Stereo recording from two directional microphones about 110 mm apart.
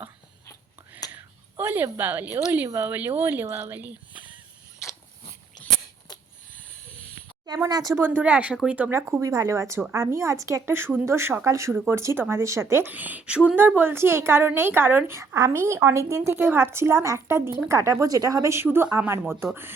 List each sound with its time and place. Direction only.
1.5 s speech: 20° right (ahead or behind)
7.6 s speech: 35° right (ahead or behind)
7.9 s a woman's voice: 20° right (ahead or behind)